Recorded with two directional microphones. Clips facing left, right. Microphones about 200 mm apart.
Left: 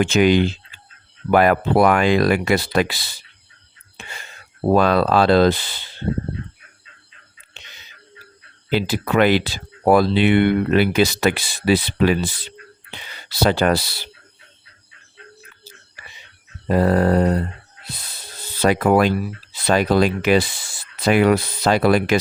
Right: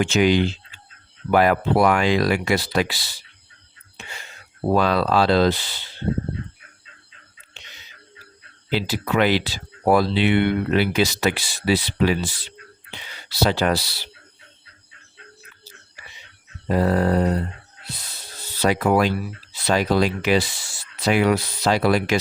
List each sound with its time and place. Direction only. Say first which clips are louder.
0.0 s speech: left 3 dB; 55° left (ahead or behind)
4.7 s speech: left 3 dB; 50° left (ahead or behind)
8.7 s speech: left 3 dB; 50° left (ahead or behind)
13.3 s speech: left 3 dB; 55° left (ahead or behind)
16.6 s speech: left 3 dB; 55° left (ahead or behind)
18.6 s speech: left 3 dB; 55° left (ahead or behind)